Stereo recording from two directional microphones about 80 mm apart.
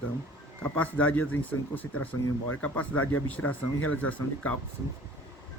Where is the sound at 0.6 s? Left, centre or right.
Left.